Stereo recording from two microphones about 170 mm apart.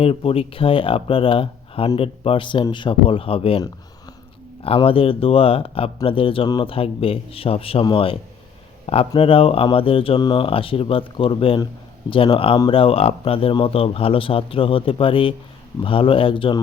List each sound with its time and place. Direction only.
0.0 s speech: 35° left (ahead or behind)
4.6 s speech: 35° left (ahead or behind)